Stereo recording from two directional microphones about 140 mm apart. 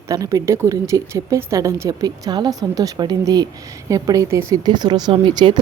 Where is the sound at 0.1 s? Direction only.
25° right (ahead or behind).